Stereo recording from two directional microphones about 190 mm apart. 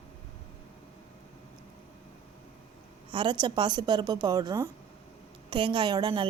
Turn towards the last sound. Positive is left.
turn(degrees=-25)  # may be behind; listen again after turning